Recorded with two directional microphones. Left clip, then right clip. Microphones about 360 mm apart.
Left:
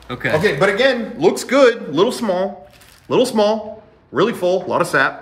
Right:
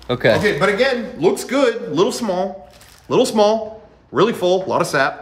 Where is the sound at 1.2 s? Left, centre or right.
Centre.